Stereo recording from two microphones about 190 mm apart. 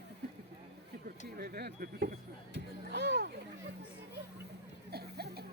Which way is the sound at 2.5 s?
65° right (ahead or behind).